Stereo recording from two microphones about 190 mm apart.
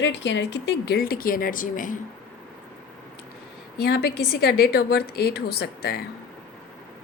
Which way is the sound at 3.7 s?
55° left (ahead or behind).